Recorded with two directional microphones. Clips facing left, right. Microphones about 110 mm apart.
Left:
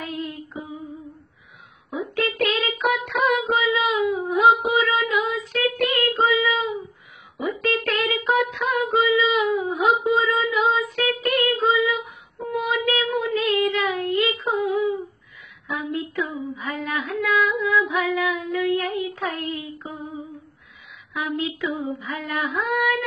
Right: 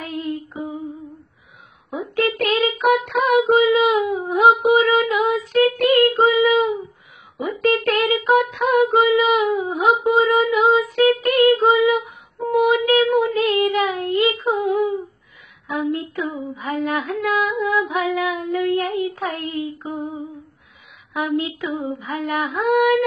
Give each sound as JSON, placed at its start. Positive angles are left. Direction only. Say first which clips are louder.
{"t": 0.0, "sound": "child singing", "louder": "right 4 dB", "side_deg": -45}
{"t": 1.9, "sound": "a sound", "louder": "right 4 dB", "side_deg": -45}
{"t": 4.1, "sound": "female singing", "louder": "right 2 dB", "side_deg": -45}
{"t": 7.3, "sound": "music", "louder": "right 5 dB", "side_deg": -45}
{"t": 15.7, "sound": "female singing", "louder": "right 4 dB", "side_deg": -45}
{"t": 21.2, "sound": "female singing", "louder": "right 4 dB", "side_deg": -40}